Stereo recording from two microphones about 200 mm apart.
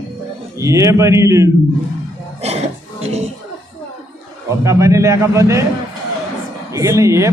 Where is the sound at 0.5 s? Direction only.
15° right (ahead or behind).